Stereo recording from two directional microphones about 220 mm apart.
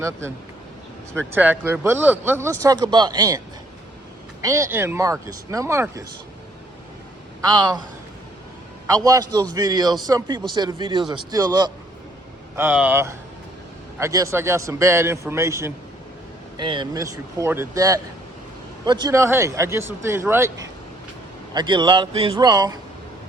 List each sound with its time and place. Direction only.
1.3 s speech: 10° right (ahead or behind)
7.4 s speech: 20° right (ahead or behind)
8.9 s speech: 15° right (ahead or behind)